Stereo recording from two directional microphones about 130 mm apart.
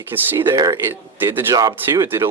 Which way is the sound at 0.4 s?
30° right (ahead or behind).